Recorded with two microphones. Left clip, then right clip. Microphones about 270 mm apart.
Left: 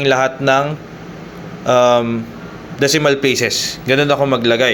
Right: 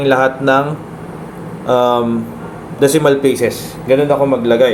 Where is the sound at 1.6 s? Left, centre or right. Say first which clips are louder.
Left 1 dB; centre.